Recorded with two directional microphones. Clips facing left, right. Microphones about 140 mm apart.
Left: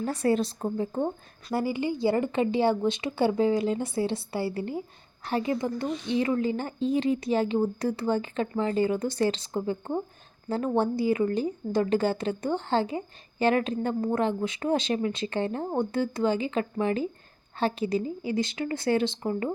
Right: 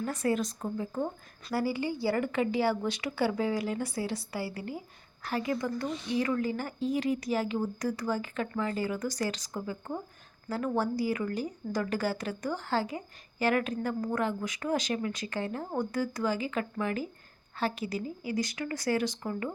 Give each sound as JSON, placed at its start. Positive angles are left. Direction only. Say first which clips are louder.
{"t": 0.0, "sound": "a woman's voice", "louder": "left 4 dB", "side_deg": 30}